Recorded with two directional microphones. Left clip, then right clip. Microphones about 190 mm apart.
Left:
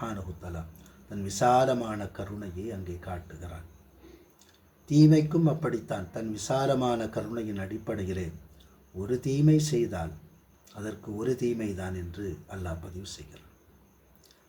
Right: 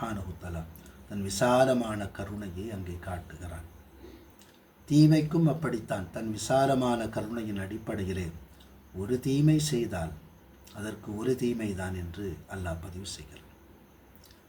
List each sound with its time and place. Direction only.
0.0 s speech: 5° left (ahead or behind)
4.9 s speech: 5° left (ahead or behind)